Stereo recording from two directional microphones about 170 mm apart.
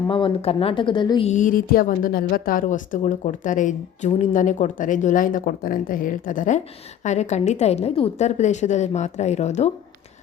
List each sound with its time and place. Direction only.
0.1 s a woman's voice: 30° left (ahead or behind)
1.3 s a woman's voice: 50° left (ahead or behind)